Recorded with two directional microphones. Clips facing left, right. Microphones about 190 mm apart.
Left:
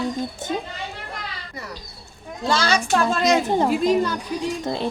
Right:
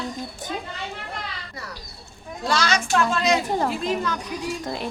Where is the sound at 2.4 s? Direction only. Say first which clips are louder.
Left 2 dB; 25° left (ahead or behind).